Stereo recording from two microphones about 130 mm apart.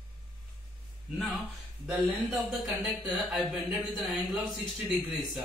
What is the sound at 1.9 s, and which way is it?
Speech, centre (ahead or behind).